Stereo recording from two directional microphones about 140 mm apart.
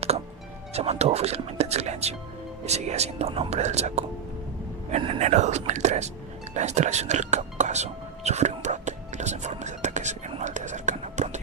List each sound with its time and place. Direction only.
0.7 s speech: 50° right (ahead or behind)
6.5 s whispering: 55° right (ahead or behind)